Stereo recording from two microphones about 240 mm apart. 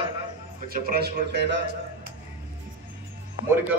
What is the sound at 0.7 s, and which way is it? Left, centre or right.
Speech, right.